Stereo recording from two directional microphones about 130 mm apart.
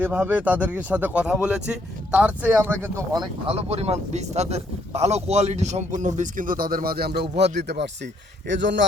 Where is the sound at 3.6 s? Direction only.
55° right (ahead or behind); by 6.8 s 90° right.